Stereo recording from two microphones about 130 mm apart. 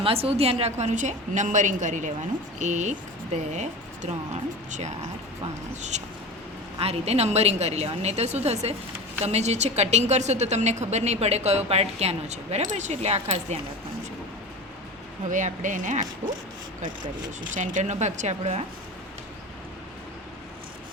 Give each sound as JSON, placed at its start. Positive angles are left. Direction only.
{"t": 0.0, "sound": "a woman's voice", "side_deg": -45}
{"t": 5.9, "sound": "a woman's voice", "side_deg": -65}
{"t": 6.7, "sound": "a woman's voice", "side_deg": -50}
{"t": 15.3, "sound": "a woman's voice", "side_deg": -75}
{"t": 17.4, "sound": "a woman's voice", "side_deg": -75}